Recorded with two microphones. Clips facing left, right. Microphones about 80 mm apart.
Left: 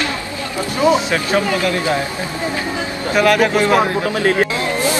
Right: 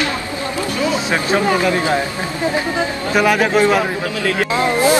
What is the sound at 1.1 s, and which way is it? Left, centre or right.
Speech, right.